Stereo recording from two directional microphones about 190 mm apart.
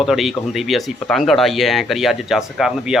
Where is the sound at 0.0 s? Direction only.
Centre (ahead or behind).